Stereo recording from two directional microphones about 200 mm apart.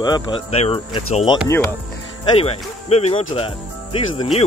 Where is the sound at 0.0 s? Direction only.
20° left (ahead or behind).